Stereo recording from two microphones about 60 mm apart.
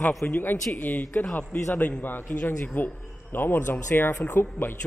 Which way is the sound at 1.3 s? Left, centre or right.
Left.